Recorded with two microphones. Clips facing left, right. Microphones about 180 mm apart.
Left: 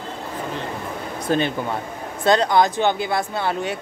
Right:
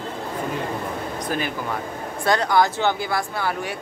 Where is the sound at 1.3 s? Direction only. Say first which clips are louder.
Left 7 dB; 25° left (ahead or behind).